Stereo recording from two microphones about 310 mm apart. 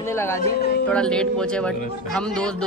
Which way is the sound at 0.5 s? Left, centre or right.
Left.